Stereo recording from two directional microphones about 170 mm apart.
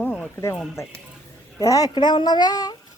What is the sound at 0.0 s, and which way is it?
Speech, 10° left (ahead or behind).